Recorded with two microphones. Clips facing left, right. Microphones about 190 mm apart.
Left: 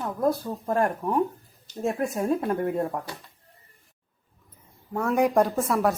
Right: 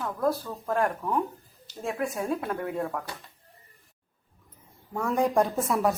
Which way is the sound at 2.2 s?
30° left (ahead or behind).